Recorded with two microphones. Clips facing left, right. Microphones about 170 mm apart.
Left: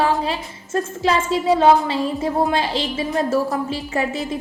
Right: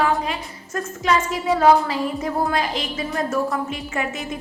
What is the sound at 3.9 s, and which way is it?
Speech, 35° left (ahead or behind).